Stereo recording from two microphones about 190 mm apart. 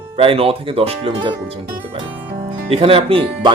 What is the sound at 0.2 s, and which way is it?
A man's voice, 30° right (ahead or behind).